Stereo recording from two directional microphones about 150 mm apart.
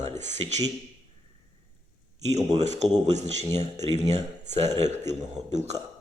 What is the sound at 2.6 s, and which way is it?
A man's voice, 50° right (ahead or behind).